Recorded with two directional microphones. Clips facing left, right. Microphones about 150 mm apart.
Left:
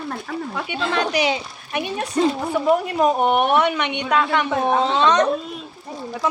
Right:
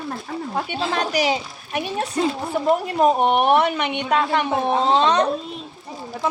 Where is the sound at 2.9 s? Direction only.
35° right (ahead or behind).